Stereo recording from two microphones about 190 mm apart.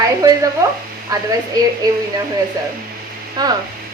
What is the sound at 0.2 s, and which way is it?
A woman's voice, 15° right (ahead or behind).